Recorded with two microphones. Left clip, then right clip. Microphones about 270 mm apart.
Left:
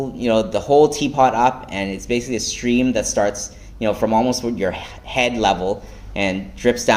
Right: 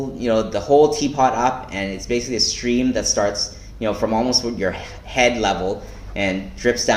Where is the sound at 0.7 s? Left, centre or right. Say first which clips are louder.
Even; left.